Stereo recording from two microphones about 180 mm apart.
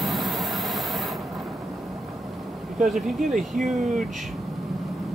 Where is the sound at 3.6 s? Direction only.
45° right (ahead or behind).